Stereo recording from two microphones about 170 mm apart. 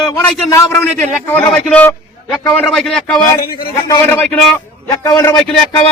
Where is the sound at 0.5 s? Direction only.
15° left (ahead or behind).